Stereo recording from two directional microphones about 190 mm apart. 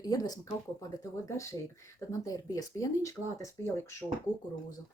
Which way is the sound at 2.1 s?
20° left (ahead or behind).